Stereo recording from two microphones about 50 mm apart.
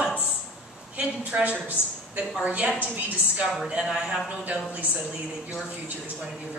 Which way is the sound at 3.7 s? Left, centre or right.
Centre.